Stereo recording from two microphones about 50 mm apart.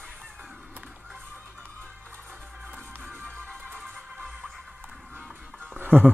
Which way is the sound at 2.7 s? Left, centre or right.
Right.